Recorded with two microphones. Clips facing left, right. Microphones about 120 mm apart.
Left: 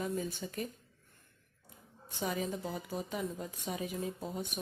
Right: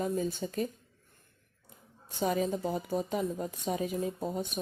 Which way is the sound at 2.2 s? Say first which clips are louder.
Right 6 dB; 40° right (ahead or behind).